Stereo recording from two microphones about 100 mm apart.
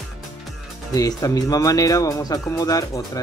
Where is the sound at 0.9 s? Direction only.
40° left (ahead or behind).